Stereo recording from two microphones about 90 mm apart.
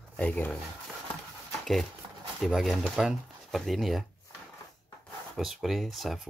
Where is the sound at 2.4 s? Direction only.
5° right (ahead or behind).